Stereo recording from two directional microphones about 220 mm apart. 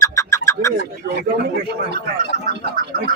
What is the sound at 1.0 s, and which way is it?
Speech, 45° right (ahead or behind).